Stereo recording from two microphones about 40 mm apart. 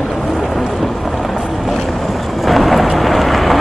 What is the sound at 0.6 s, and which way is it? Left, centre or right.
Boat, centre.